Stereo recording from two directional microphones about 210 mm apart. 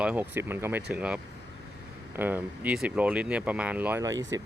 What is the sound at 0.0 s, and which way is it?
Speech, 5° right (ahead or behind).